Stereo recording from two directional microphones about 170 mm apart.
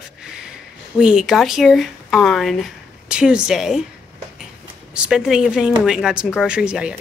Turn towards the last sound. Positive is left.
turn(degrees=-5)  # may be behind; listen again after turning